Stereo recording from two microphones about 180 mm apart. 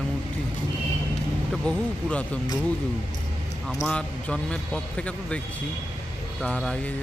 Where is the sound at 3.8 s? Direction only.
5° left (ahead or behind).